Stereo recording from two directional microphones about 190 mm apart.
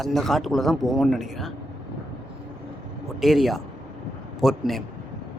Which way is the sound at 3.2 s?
Centre (ahead or behind).